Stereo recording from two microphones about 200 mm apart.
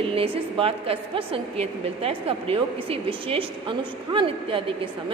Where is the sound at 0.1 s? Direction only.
25° right (ahead or behind).